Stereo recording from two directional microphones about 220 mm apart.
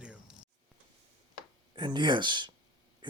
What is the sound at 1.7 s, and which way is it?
Speech, 20° right (ahead or behind).